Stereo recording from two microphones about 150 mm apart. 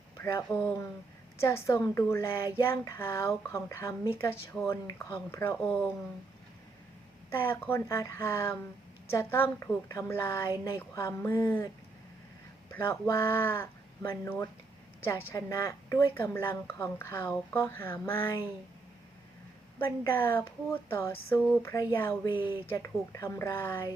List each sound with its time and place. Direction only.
0.2 s speech: 15° left (ahead or behind)
7.3 s speech: 15° left (ahead or behind)
12.7 s speech: 15° left (ahead or behind)
19.8 s speech: 15° left (ahead or behind)